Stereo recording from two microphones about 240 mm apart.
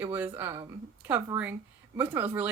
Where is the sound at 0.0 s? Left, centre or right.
Centre.